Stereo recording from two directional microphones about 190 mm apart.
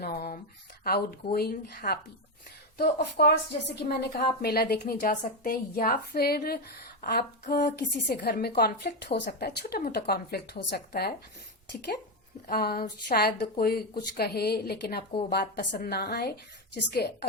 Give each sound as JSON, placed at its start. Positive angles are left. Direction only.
{"t": 0.0, "sound": "a sound", "side_deg": 50}
{"t": 0.9, "sound": "a woman's voice", "side_deg": 55}
{"t": 8.0, "sound": "a woman's voice", "side_deg": 55}
{"t": 12.5, "sound": "a woman's voice", "side_deg": 50}